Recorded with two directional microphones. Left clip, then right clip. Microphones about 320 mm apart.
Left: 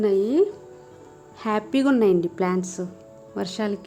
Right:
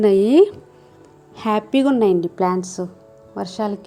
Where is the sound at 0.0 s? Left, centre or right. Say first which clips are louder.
Right 7 dB; centre.